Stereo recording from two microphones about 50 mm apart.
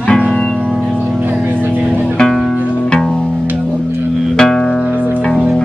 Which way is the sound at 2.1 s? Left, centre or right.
Centre.